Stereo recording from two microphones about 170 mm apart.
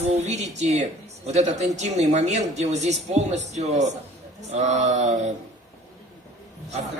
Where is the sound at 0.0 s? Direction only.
40° right (ahead or behind).